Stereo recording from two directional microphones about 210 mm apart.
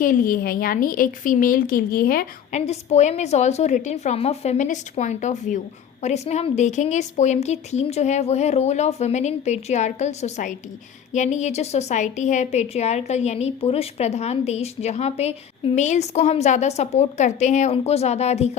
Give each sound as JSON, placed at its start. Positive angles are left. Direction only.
{"t": 0.0, "sound": "a woman's voice", "side_deg": 40}